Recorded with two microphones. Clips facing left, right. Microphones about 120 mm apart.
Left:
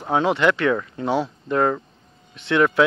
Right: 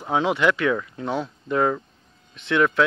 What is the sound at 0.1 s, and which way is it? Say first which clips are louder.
Speech: left 2 dB; 5° right (ahead or behind).